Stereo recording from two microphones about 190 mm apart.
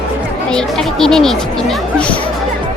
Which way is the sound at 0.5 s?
5° left (ahead or behind).